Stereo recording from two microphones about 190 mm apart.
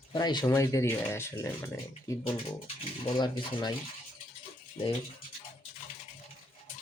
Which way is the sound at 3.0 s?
25° left (ahead or behind).